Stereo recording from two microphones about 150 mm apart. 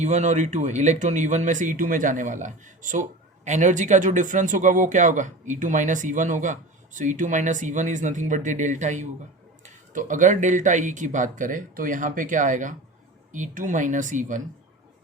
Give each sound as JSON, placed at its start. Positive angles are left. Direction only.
{"t": 0.0, "sound": "speech", "side_deg": -50}